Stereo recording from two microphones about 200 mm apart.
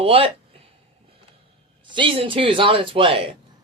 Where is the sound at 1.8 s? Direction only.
25° right (ahead or behind).